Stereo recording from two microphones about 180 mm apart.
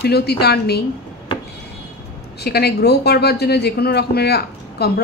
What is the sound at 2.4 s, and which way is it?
Speech, 60° left (ahead or behind).